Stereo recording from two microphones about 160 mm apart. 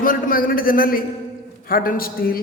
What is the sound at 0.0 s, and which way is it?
A man's voice, 60° left (ahead or behind).